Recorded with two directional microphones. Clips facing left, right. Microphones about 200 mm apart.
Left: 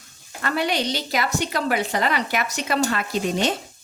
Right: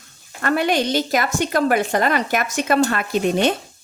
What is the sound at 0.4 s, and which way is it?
Speech, 50° right (ahead or behind).